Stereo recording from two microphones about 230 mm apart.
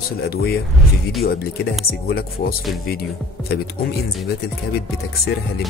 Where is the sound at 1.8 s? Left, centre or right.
Left.